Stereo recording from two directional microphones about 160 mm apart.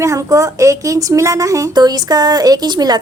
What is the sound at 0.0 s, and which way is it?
A woman's voice, 20° right (ahead or behind).